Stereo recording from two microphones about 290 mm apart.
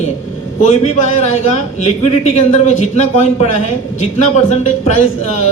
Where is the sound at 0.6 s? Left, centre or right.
Left.